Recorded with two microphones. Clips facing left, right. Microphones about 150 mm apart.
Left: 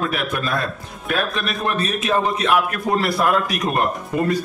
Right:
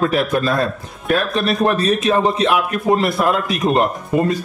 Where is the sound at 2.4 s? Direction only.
25° right (ahead or behind).